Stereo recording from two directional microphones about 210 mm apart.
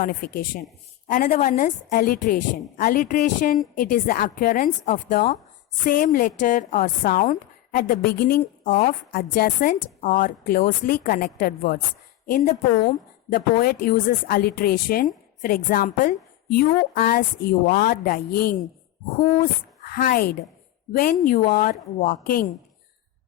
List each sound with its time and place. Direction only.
0.0 s a woman's voice: 45° left (ahead or behind)
13.3 s a woman's voice: 45° left (ahead or behind)